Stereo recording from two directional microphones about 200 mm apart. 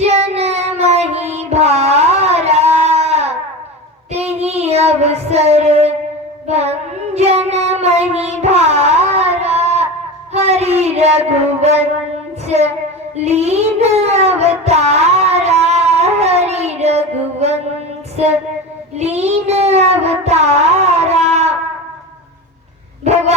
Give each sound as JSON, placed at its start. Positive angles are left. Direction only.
{"t": 0.0, "sound": "child singing", "side_deg": -30}
{"t": 13.2, "sound": "child singing", "side_deg": -30}
{"t": 18.2, "sound": "speech", "side_deg": -30}
{"t": 18.9, "sound": "child singing", "side_deg": -30}